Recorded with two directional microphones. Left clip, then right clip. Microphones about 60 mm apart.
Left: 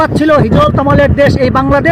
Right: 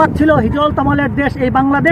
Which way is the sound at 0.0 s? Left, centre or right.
Centre.